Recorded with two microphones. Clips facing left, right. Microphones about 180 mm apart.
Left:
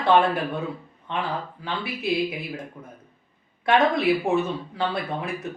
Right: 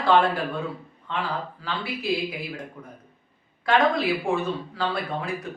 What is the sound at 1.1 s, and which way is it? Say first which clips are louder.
Speech: left 1 dB; 20° left (ahead or behind).